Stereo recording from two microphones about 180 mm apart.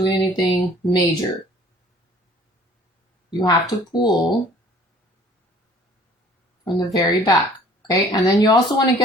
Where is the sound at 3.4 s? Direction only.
25° left (ahead or behind).